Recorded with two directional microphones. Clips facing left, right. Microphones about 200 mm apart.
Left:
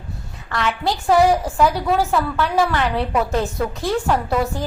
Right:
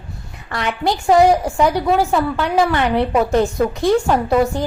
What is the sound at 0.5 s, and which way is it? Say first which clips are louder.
A woman's voice: right 2 dB; 15° right (ahead or behind).